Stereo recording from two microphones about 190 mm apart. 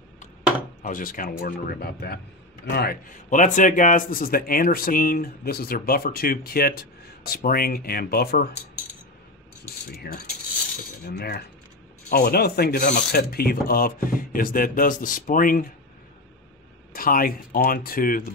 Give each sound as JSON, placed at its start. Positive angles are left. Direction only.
{"t": 0.8, "sound": "a man's voice", "side_deg": 45}
{"t": 9.8, "sound": "a sound", "side_deg": 55}
{"t": 11.1, "sound": "a man's voice", "side_deg": 50}
{"t": 16.9, "sound": "a man's voice", "side_deg": 50}